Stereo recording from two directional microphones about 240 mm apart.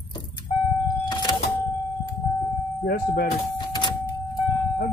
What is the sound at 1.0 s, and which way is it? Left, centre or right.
Power windows, centre.